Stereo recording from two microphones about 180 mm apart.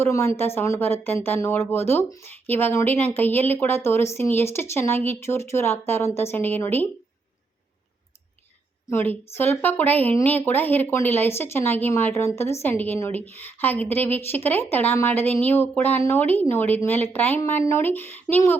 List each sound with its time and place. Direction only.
0.0 s a woman's voice: 15° left (ahead or behind)
8.9 s a woman's voice: 10° left (ahead or behind)